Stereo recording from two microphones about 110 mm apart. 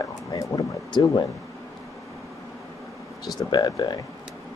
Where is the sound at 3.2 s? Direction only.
40° left (ahead or behind).